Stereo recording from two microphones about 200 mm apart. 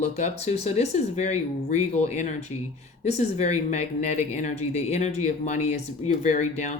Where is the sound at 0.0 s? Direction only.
35° left (ahead or behind).